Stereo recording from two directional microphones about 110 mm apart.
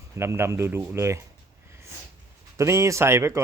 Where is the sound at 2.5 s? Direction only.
25° right (ahead or behind).